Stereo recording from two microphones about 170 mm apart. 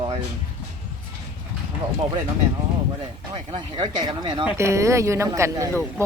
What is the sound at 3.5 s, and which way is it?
Speech, 30° right (ahead or behind).